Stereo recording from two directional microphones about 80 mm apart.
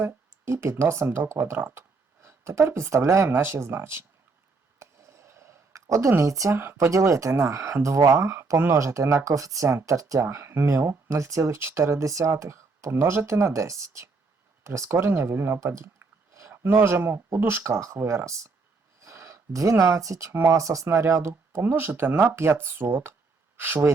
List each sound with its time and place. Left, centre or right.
0.0 s speech: right
4.8 s a sound: right
6.6 s speech: right